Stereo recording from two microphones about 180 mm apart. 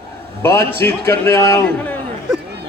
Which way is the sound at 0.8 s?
15° left (ahead or behind).